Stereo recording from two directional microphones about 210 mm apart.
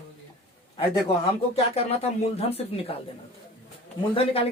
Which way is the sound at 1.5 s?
30° left (ahead or behind).